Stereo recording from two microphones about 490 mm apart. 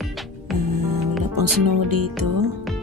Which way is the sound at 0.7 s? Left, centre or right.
Right.